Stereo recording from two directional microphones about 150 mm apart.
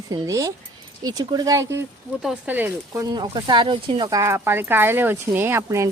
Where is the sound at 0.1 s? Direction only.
25° right (ahead or behind).